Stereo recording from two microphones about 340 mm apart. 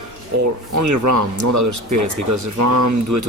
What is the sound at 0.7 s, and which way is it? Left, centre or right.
Speech, right.